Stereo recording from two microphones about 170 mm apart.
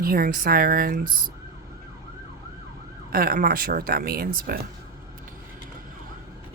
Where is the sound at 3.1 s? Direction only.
60° right (ahead or behind).